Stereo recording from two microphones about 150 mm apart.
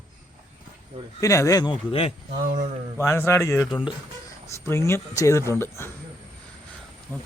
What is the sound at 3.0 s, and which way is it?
Speech, 15° left (ahead or behind).